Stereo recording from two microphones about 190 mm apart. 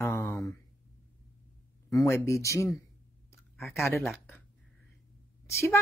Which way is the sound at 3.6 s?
Centre (ahead or behind).